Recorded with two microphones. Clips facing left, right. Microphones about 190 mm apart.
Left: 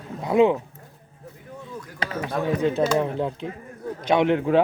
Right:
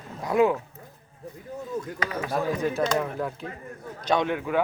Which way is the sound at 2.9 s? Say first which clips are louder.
Left 4 dB; 25° left (ahead or behind).